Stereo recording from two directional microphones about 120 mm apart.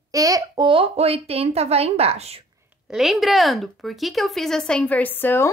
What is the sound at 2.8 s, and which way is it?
Speech, centre (ahead or behind).